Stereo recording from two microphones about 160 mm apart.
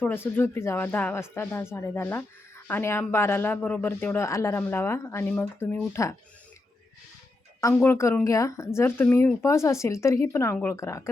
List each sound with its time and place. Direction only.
0.0 s speech: 15° left (ahead or behind)
7.6 s speech: 15° left (ahead or behind)